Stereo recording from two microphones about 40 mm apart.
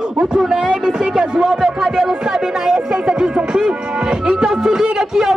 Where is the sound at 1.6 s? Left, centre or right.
Centre.